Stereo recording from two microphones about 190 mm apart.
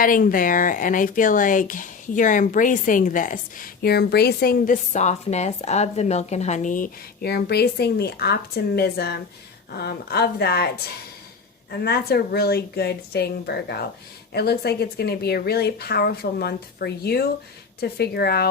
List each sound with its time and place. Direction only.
0.0 s speech: 45° left (ahead or behind)
11.7 s speech: 55° left (ahead or behind)